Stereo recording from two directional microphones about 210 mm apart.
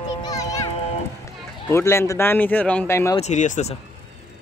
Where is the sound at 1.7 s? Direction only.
10° left (ahead or behind).